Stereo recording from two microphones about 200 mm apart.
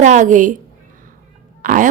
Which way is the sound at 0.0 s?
35° right (ahead or behind).